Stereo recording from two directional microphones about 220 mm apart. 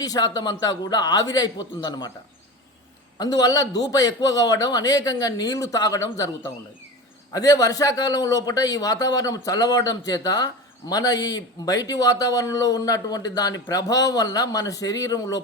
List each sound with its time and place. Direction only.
0.0 s a man's voice: 15° left (ahead or behind)
3.2 s a man's voice: 15° left (ahead or behind)